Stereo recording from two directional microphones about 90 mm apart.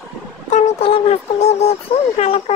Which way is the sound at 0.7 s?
90° left.